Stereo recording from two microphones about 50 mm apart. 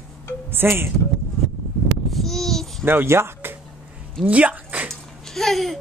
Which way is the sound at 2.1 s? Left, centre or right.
Centre.